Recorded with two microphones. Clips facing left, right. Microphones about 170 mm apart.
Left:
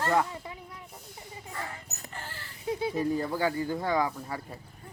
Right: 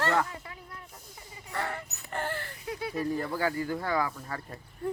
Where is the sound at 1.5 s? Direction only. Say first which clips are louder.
Right 6 dB; 70° right (ahead or behind).